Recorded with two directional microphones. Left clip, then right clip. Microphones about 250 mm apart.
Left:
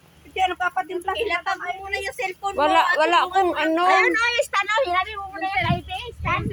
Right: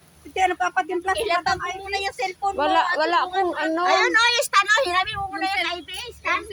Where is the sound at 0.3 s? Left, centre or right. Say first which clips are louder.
Right 1 dB; right.